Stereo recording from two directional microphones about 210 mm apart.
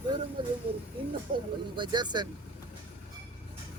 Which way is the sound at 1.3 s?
45° right (ahead or behind).